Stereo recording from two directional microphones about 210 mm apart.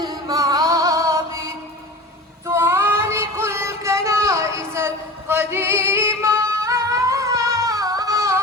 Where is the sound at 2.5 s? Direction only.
10° right (ahead or behind).